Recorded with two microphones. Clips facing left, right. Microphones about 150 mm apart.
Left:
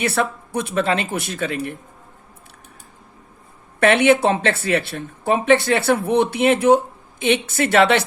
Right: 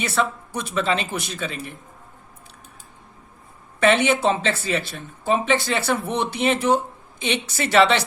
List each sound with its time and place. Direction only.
0.0 s speech: 60° left (ahead or behind)
3.8 s a woman's voice: 60° left (ahead or behind)